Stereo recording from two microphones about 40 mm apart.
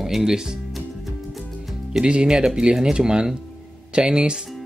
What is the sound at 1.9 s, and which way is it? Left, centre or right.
Speech, right.